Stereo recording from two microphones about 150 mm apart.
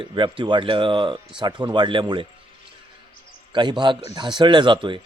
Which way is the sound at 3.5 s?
30° right (ahead or behind).